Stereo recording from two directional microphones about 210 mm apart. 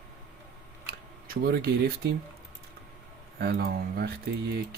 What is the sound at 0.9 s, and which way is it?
Speech, 45° right (ahead or behind).